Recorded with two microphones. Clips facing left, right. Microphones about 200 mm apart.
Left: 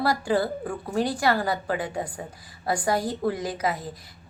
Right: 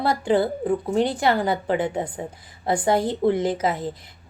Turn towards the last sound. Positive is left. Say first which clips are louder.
# right 5 dB
turn(degrees=-25)  # may be behind; listen again after turning